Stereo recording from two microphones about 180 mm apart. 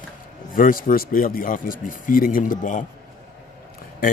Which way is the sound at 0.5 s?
50° left (ahead or behind).